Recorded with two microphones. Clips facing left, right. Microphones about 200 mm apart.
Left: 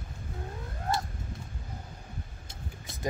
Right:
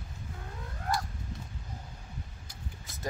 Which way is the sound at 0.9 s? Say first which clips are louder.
Left 1 dB; 25° left (ahead or behind).